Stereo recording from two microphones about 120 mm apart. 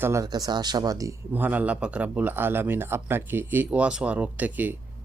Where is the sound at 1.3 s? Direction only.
15° right (ahead or behind).